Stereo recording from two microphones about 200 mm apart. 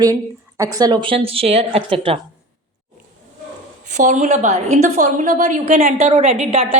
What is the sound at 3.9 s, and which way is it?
A woman's voice, 35° right (ahead or behind).